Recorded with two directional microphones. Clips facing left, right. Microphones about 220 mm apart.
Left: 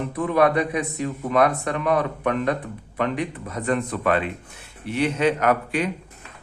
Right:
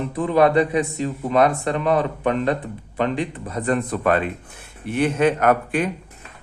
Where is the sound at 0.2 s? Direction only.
30° right (ahead or behind).